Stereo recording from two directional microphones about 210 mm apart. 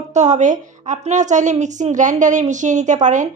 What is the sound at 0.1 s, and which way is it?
A woman's voice, 35° right (ahead or behind).